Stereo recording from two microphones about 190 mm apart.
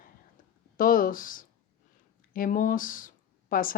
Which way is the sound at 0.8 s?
45° left (ahead or behind).